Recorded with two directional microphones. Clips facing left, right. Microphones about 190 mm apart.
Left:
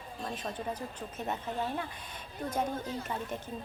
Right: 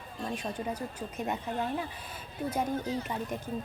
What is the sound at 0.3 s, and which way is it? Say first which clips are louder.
A woman's voice: right 2 dB; 10° right (ahead or behind).